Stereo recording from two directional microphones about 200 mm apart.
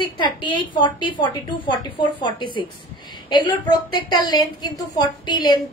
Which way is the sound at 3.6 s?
20° left (ahead or behind).